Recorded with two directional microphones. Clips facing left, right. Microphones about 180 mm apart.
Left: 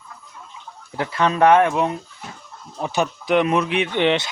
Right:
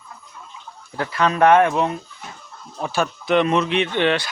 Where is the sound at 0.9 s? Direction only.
20° left (ahead or behind).